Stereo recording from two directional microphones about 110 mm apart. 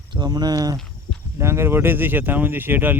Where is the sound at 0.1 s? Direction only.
40° right (ahead or behind).